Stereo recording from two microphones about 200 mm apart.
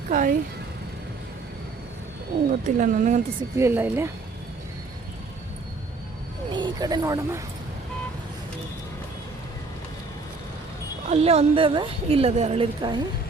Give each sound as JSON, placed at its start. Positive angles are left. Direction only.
{"t": 0.1, "sound": "speech", "side_deg": -40}
{"t": 2.5, "sound": "speech", "side_deg": -40}
{"t": 3.6, "sound": "speech", "side_deg": -10}
{"t": 6.5, "sound": "speech", "side_deg": -20}
{"t": 11.1, "sound": "a woman's voice", "side_deg": -30}